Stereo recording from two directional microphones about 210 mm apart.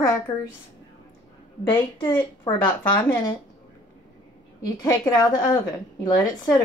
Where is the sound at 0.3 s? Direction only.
20° left (ahead or behind).